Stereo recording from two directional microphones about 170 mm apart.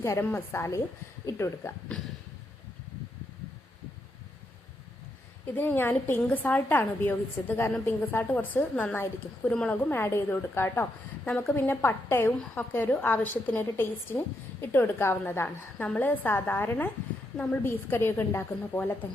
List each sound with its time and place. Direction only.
0.0 s a woman's voice: 15° left (ahead or behind)
5.5 s a woman's voice: 10° left (ahead or behind)